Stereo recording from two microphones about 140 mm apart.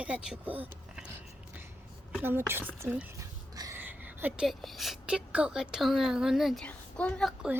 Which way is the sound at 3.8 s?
10° right (ahead or behind).